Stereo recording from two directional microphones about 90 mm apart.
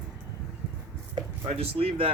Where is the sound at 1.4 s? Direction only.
90° right.